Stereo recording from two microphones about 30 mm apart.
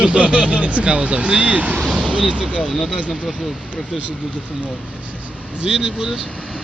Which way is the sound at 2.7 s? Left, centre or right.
Centre.